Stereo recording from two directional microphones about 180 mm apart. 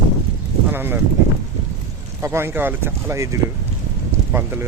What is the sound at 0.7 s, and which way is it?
Speech, 10° right (ahead or behind).